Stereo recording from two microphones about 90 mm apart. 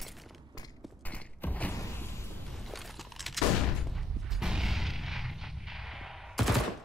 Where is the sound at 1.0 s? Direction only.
20° left (ahead or behind).